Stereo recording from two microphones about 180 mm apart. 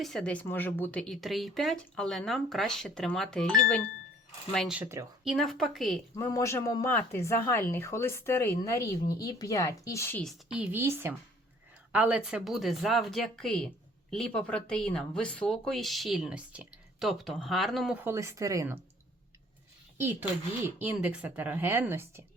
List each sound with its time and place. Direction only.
0.0 s a woman's voice: 5° left (ahead or behind)
5.2 s speech: centre (ahead or behind)
6.1 s speech: 15° left (ahead or behind)
10.5 s a woman's voice: 10° right (ahead or behind)
20.0 s a woman's voice: 10° right (ahead or behind)